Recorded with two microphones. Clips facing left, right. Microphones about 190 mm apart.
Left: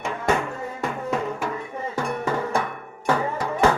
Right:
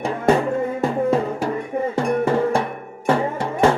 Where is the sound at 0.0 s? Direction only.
35° right (ahead or behind).